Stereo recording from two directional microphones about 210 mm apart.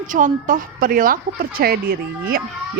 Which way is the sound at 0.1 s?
40° right (ahead or behind).